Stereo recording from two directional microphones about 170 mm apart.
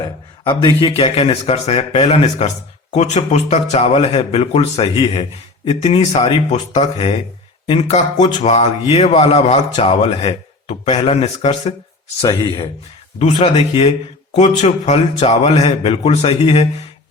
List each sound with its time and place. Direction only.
0.0 s a man's voice: 25° left (ahead or behind)
12.2 s speech: 25° left (ahead or behind)
13.1 s a man's voice: 40° left (ahead or behind)